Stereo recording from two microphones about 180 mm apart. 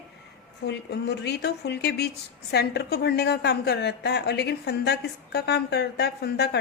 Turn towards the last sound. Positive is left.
turn(degrees=65)  # may be behind; listen again after turning